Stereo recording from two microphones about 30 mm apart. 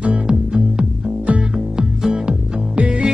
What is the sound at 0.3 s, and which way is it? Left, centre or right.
Music, right.